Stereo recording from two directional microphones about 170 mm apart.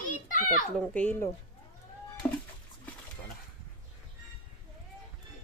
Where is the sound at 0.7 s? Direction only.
10° left (ahead or behind).